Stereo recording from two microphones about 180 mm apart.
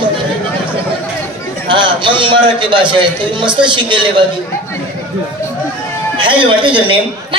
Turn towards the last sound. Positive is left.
turn(degrees=-25)  # may be behind; listen again after turning